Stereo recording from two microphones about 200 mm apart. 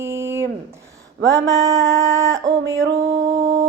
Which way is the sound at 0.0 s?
15° right (ahead or behind).